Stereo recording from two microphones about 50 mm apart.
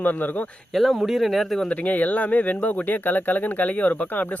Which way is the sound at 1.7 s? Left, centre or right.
Left.